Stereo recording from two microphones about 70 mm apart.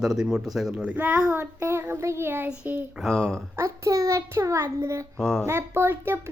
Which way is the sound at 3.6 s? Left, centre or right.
Right.